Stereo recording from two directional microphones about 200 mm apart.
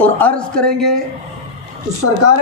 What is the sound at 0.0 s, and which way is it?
Speech, 10° left (ahead or behind).